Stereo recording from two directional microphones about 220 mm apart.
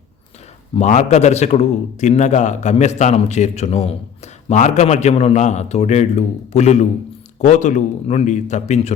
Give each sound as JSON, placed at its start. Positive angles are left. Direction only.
{"t": 0.8, "sound": "a man's voice", "side_deg": 30}